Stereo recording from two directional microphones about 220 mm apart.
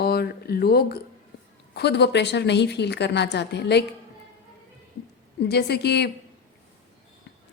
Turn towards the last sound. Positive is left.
turn(degrees=50)  # may be behind; listen again after turning